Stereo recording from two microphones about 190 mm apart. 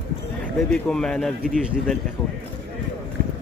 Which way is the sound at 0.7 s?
5° left (ahead or behind).